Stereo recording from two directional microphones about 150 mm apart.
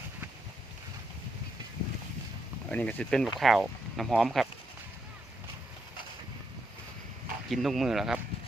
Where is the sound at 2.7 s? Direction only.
10° left (ahead or behind).